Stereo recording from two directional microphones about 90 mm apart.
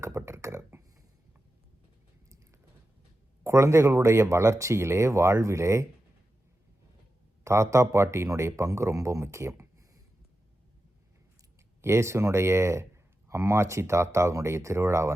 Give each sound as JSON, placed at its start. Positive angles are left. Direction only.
{"t": 0.0, "sound": "a sound", "side_deg": -30}
{"t": 3.4, "sound": "speech", "side_deg": -35}
{"t": 7.4, "sound": "speech", "side_deg": -30}
{"t": 11.8, "sound": "speech", "side_deg": -30}